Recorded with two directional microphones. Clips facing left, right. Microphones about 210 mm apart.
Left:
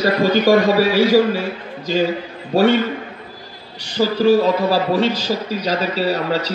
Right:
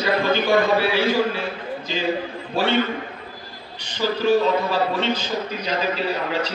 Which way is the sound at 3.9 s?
40° left (ahead or behind).